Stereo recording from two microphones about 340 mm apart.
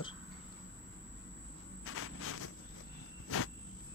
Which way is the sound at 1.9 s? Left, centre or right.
Left.